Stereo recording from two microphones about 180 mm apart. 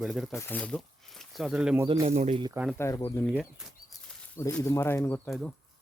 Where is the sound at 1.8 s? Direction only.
25° right (ahead or behind).